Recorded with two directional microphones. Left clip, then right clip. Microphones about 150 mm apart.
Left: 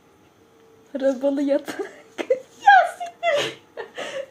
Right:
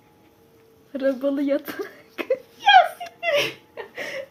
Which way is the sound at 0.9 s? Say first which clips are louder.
Left 2 dB; 20° right (ahead or behind).